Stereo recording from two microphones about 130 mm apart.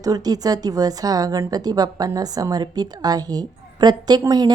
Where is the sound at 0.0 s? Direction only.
30° right (ahead or behind).